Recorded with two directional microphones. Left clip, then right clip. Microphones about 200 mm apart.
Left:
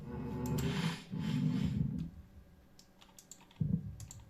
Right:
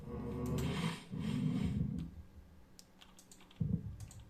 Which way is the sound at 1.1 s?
40° left (ahead or behind).